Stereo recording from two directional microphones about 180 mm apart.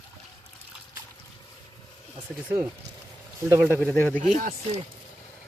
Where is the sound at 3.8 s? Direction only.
10° left (ahead or behind).